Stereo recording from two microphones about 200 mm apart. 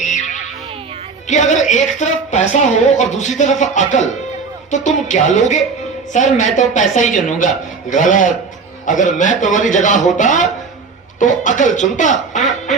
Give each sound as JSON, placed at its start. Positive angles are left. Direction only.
{"t": 0.0, "sound": "music", "side_deg": 35}
{"t": 1.3, "sound": "speech", "side_deg": 35}